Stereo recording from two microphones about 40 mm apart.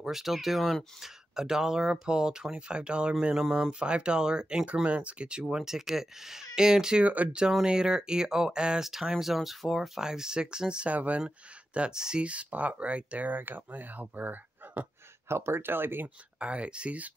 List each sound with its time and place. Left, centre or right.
0.0 s speech: centre
1.0 s speech: centre
3.3 s speech: centre
3.8 s speech: right
4.8 s speech: right
5.6 s speech: centre
7.0 s speech: right
7.6 s speech: right
8.8 s speech: centre; by 10.9 s right
10.9 s speech: right
11.2 s speech: right
13.3 s speech: right
15.2 s speech: right
16.3 s speech: right